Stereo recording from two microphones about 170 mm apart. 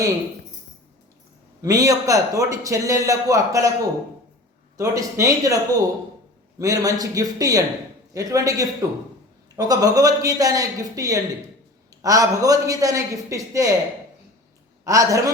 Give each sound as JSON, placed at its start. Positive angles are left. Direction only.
{"t": 1.6, "sound": "a man's voice", "side_deg": -20}
{"t": 4.8, "sound": "a man's voice", "side_deg": -20}
{"t": 14.8, "sound": "a man's voice", "side_deg": -20}